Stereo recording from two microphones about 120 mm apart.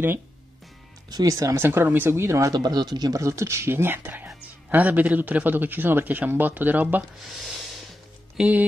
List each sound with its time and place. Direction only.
1.1 s speech: 30° right (ahead or behind)
7.2 s a sound: centre (ahead or behind)
8.4 s speech: 10° right (ahead or behind)